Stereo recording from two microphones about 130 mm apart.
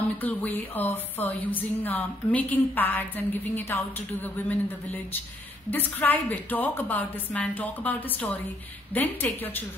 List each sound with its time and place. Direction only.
0.2 s a woman's voice: 15° left (ahead or behind)